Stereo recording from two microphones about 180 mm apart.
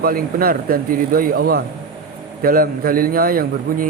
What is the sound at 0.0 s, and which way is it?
Speech, 55° right (ahead or behind).